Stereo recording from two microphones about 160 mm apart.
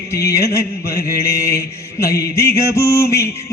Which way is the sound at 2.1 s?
20° left (ahead or behind).